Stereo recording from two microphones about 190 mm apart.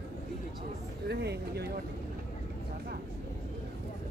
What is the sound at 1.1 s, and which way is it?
Speech, 60° right (ahead or behind).